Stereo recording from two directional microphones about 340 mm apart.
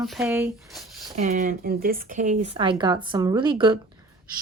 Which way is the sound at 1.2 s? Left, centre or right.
Right.